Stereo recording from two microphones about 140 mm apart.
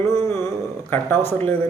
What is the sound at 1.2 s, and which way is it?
Speech, 50° right (ahead or behind).